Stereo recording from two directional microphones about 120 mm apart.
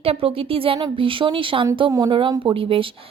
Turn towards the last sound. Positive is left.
turn(degrees=-50)  # may be behind; listen again after turning